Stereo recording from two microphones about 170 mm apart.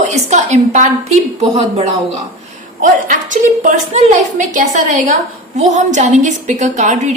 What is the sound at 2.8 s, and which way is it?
A woman's voice, 50° right (ahead or behind).